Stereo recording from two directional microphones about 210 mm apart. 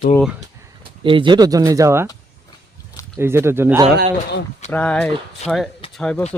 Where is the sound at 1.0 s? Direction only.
25° right (ahead or behind).